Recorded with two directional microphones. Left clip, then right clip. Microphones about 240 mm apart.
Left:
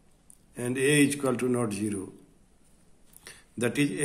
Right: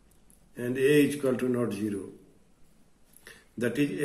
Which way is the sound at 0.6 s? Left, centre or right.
Left.